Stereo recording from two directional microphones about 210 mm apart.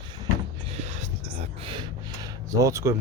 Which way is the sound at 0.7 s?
30° right (ahead or behind).